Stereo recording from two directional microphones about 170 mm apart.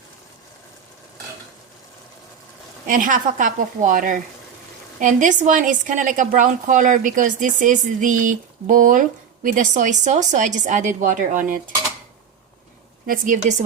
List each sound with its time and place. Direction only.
2.8 s a woman's voice: 50° right (ahead or behind)
13.1 s a woman's voice: 50° right (ahead or behind)